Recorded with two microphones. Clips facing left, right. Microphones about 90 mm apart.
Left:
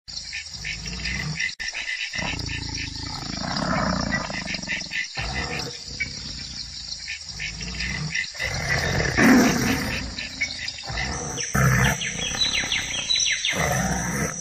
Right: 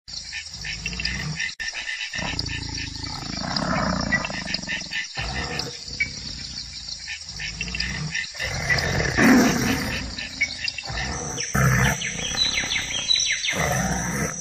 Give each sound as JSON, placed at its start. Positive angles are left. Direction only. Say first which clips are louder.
{"t": 1.0, "sound": "dog", "louder": "left 1 dB", "side_deg": -40}
{"t": 3.3, "sound": "wild animals", "louder": "even", "side_deg": 0}
{"t": 4.6, "sound": "wild animals", "louder": "even", "side_deg": -45}
{"t": 5.3, "sound": "a sound", "louder": "even", "side_deg": -40}
{"t": 8.5, "sound": "roar", "louder": "right 1 dB", "side_deg": 0}
{"t": 11.1, "sound": "wild animals", "louder": "even", "side_deg": 0}